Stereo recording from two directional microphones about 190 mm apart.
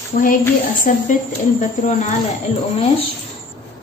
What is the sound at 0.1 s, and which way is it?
Speech, 50° left (ahead or behind).